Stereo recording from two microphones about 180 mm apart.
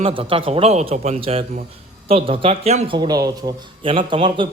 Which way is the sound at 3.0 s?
20° right (ahead or behind).